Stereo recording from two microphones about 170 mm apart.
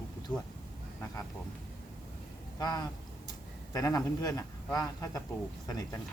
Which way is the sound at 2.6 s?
25° left (ahead or behind).